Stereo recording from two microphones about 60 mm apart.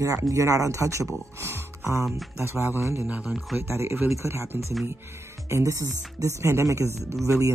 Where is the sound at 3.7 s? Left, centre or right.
Right.